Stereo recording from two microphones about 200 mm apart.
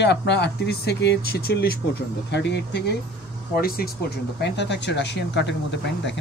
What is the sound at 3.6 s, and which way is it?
Speech, 50° left (ahead or behind).